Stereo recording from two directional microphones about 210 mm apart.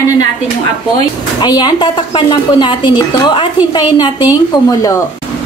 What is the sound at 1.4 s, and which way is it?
A woman's voice, 20° left (ahead or behind).